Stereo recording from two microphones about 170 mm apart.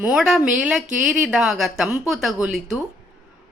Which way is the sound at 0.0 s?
5° right (ahead or behind).